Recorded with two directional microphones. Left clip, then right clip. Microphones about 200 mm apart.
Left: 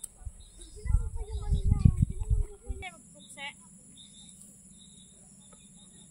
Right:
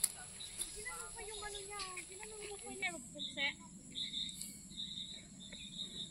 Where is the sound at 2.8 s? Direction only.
10° left (ahead or behind).